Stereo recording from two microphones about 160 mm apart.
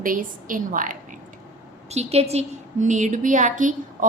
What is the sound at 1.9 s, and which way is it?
A woman's voice, 40° right (ahead or behind).